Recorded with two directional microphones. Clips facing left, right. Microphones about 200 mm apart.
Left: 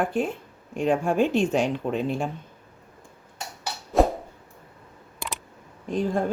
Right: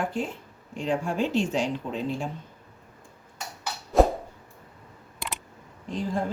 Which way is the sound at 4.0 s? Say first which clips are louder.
Right 1 dB; centre (ahead or behind).